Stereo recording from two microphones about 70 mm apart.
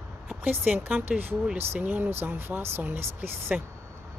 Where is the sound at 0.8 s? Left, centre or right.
Right.